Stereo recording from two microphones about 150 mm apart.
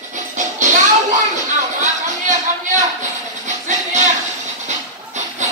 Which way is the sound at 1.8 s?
55° right (ahead or behind).